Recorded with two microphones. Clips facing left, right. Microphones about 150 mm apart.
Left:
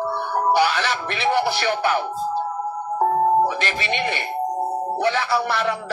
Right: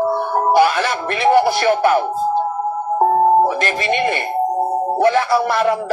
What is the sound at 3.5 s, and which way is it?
Speech, 45° right (ahead or behind).